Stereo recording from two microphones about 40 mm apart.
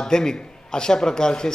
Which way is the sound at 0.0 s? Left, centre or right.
Centre.